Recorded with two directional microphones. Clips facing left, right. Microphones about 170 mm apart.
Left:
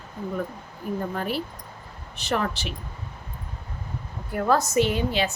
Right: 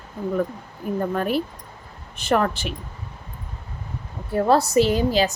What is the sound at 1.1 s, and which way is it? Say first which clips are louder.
Speech: right 5 dB; 50° right (ahead or behind).